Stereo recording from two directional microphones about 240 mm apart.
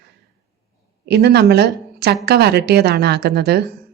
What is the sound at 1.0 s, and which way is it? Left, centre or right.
A woman's voice, right.